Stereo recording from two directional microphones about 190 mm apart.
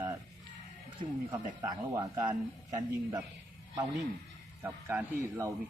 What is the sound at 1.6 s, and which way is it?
Speech, 20° right (ahead or behind).